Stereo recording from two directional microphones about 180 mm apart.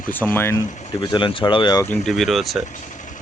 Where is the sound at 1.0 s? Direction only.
25° left (ahead or behind).